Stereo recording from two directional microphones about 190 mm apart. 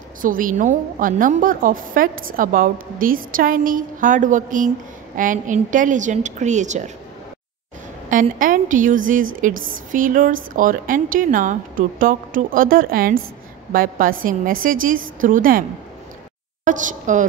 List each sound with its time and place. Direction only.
0.2 s a woman's voice: 45° right (ahead or behind)
8.1 s a woman's voice: 45° right (ahead or behind)
16.6 s a woman's voice: 40° right (ahead or behind)